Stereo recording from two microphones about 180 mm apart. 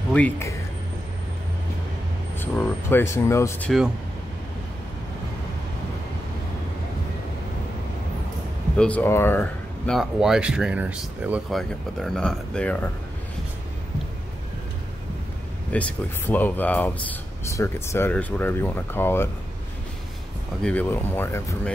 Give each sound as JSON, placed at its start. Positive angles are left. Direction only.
{"t": 0.1, "sound": "speech", "side_deg": 10}
{"t": 2.3, "sound": "speech", "side_deg": 10}
{"t": 8.7, "sound": "speech", "side_deg": 10}
{"t": 9.9, "sound": "speech", "side_deg": -5}
{"t": 15.7, "sound": "speech", "side_deg": 10}
{"t": 20.6, "sound": "speech", "side_deg": 10}